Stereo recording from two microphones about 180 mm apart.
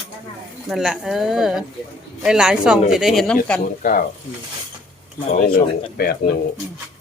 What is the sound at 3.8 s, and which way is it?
Sizzle, 50° left (ahead or behind).